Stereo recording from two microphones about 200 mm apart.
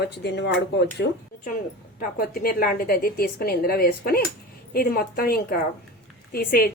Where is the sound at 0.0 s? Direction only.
55° left (ahead or behind).